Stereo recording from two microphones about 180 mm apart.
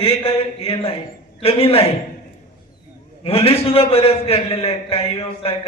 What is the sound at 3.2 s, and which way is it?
A man's voice, 35° left (ahead or behind).